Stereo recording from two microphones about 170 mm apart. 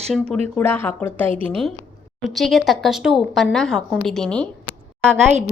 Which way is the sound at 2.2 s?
Centre (ahead or behind).